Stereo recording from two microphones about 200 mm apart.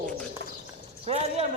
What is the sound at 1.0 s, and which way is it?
Speech, 30° right (ahead or behind).